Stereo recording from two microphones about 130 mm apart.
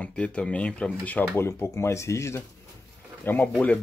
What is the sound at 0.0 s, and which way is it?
Speech, 10° left (ahead or behind).